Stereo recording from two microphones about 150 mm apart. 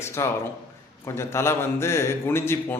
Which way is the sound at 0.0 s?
15° left (ahead or behind).